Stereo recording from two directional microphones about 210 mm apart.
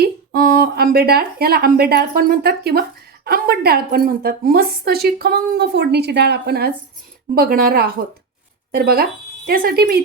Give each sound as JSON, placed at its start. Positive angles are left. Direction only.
{"t": 0.0, "sound": "a woman's voice", "side_deg": -50}